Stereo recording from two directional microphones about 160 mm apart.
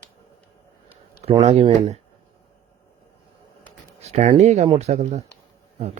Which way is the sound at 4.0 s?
45° right (ahead or behind).